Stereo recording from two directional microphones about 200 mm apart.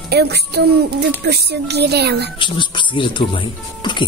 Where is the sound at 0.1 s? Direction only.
55° right (ahead or behind).